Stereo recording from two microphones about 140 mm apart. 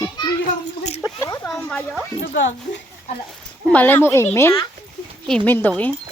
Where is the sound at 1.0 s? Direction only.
25° left (ahead or behind).